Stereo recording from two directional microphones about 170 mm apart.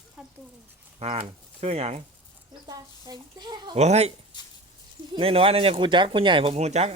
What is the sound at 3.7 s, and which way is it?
Speech, 40° right (ahead or behind).